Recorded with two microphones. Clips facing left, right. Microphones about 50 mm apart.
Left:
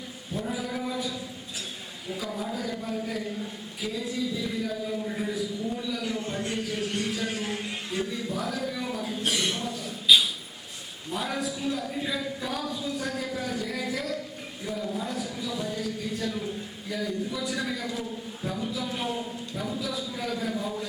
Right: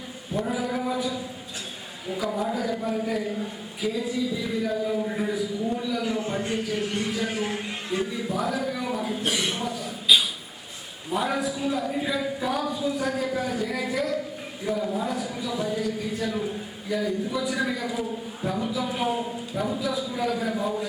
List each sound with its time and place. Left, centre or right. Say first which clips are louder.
0.3 s a sound: right 5 dB; centre
2.0 s speech: right 6 dB; centre
4.6 s a man's voice: right 5 dB; centre
19.8 s speech: right 5 dB; centre